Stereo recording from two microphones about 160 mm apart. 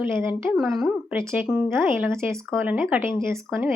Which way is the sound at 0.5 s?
Centre (ahead or behind).